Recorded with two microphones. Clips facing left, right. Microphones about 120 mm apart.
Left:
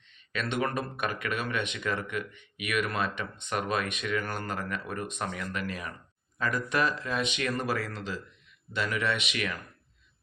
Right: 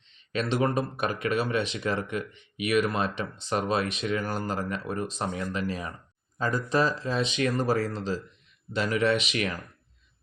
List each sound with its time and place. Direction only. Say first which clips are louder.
0.3 s speech: right 4 dB; 35° right (ahead or behind)